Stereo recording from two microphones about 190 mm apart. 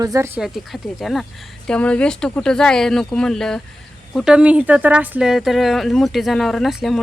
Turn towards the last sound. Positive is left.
turn(degrees=0)  # may be behind; listen again after turning